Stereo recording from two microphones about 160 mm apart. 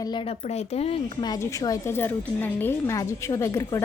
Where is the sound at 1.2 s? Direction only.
20° left (ahead or behind).